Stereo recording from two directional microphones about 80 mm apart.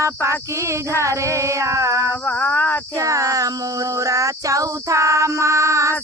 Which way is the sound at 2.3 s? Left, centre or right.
Centre.